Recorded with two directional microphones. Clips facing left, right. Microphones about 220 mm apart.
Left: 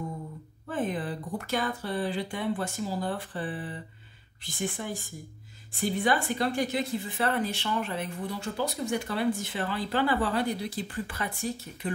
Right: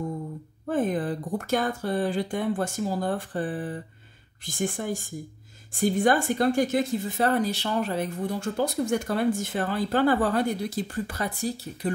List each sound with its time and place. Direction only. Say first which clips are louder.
0.7 s speech: right 5 dB; 45° right (ahead or behind)